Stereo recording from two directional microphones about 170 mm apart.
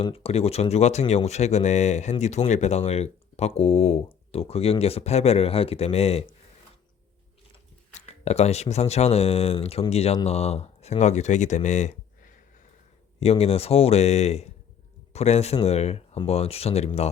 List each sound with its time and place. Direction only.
0.0 s speech: 35° left (ahead or behind)
7.9 s speech: 40° left (ahead or behind)